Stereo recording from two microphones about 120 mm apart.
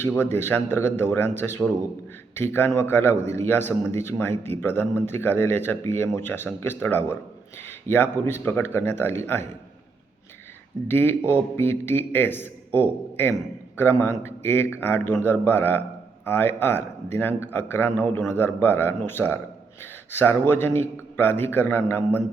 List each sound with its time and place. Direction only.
0.2 s speech: 20° left (ahead or behind)
10.8 s speech: 20° left (ahead or behind)